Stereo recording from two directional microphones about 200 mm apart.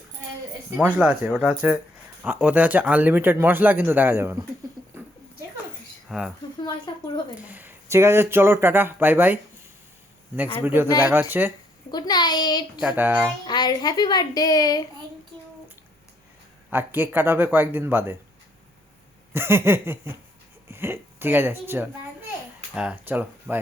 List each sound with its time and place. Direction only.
0.8 s speech: 5° right (ahead or behind)
6.1 s speech: centre (ahead or behind)
6.9 s a woman's voice: 20° left (ahead or behind)
7.3 s speech: 10° right (ahead or behind)
10.6 s speech: 10° right (ahead or behind)
11.9 s a woman's voice: 20° left (ahead or behind)
13.0 s speech: 10° right (ahead or behind)
13.5 s a woman's voice: 20° left (ahead or behind)
16.6 s speech: 10° right (ahead or behind)
19.3 s speech: 10° right (ahead or behind)